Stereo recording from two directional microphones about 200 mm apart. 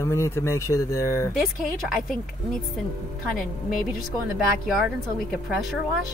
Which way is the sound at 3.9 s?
Centre (ahead or behind).